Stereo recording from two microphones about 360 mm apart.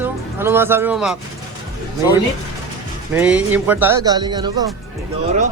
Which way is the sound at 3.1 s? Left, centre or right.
Centre.